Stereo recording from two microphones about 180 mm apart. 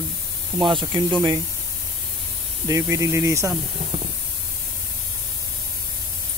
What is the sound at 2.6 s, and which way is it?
Speech, 15° right (ahead or behind).